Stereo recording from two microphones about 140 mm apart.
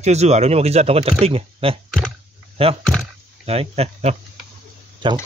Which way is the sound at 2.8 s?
Centre (ahead or behind).